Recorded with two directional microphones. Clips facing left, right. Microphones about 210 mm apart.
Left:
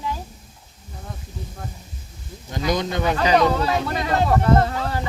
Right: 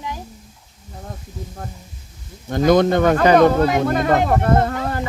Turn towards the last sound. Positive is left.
turn(degrees=-50)  # may be behind; listen again after turning